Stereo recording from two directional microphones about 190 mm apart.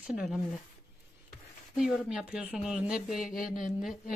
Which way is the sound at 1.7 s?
5° right (ahead or behind).